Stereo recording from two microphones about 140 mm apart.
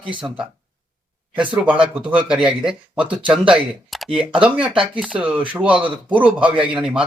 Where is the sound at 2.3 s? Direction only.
5° right (ahead or behind).